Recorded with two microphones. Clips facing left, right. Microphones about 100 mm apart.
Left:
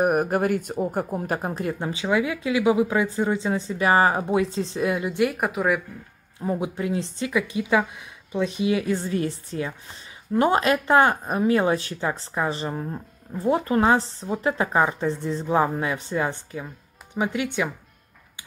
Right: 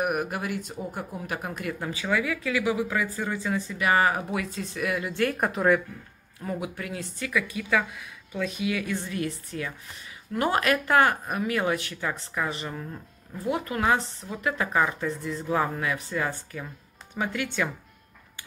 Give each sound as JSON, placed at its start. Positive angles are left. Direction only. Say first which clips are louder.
{"t": 0.0, "sound": "speech", "louder": "left 7 dB", "side_deg": 40}
{"t": 6.4, "sound": "speech", "louder": "left 6 dB", "side_deg": 25}